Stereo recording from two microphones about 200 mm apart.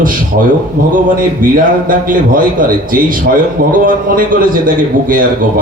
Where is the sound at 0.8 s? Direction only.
45° right (ahead or behind).